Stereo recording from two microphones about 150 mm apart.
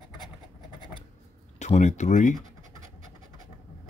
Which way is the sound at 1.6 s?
50° left (ahead or behind).